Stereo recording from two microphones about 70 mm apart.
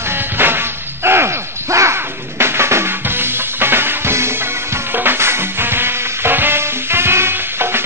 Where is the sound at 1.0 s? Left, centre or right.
Right.